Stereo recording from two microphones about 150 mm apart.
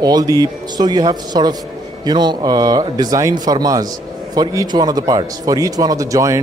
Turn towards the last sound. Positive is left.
turn(degrees=-20)  # may be behind; listen again after turning